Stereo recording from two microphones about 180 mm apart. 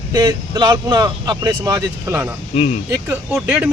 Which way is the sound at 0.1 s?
25° right (ahead or behind).